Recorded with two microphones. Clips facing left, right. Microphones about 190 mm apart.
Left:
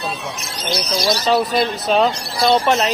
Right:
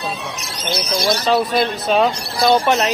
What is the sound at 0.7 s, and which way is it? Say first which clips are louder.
Speech: even; 55° right (ahead or behind).